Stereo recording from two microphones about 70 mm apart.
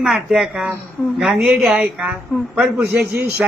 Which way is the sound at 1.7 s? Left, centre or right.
Centre.